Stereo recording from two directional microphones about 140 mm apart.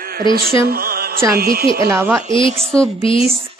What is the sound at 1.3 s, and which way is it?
Speech, 90° right.